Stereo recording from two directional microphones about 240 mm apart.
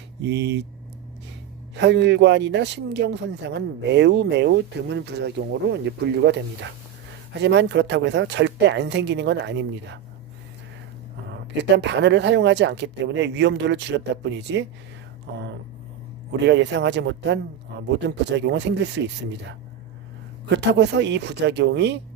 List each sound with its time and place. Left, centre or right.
0.2 s speech: right
1.7 s speech: right
11.5 s speech: right
16.4 s speech: right
20.5 s speech: right